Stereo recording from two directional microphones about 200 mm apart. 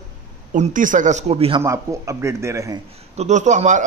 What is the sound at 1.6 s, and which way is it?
A man's voice, 15° right (ahead or behind).